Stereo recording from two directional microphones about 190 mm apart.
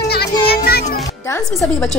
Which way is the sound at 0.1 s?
55° left (ahead or behind).